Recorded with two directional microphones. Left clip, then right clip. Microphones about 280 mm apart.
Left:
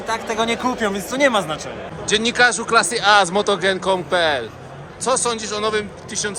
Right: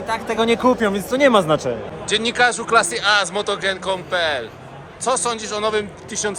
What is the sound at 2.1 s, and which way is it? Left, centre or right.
Speech, centre.